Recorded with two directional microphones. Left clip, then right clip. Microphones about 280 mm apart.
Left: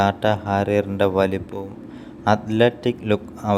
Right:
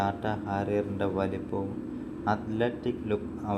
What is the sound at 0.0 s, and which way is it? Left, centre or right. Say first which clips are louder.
Speech: left 11 dB; left.